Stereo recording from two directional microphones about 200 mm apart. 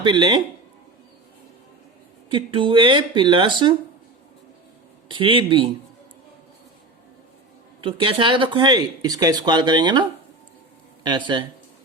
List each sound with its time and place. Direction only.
0.0 s speech: 20° right (ahead or behind)
2.3 s speech: 25° right (ahead or behind)
5.0 s speech: 25° right (ahead or behind)
7.8 s speech: 25° right (ahead or behind)